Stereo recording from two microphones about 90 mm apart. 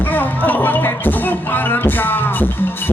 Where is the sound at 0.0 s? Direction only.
20° left (ahead or behind).